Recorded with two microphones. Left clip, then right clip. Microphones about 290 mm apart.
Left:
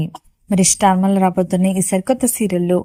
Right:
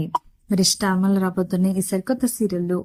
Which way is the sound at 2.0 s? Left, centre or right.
Centre.